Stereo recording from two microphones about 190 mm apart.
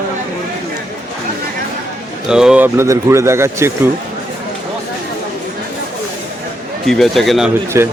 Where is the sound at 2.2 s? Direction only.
5° right (ahead or behind).